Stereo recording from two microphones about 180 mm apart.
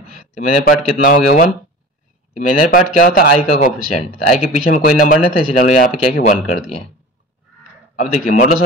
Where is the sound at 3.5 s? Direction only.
45° left (ahead or behind).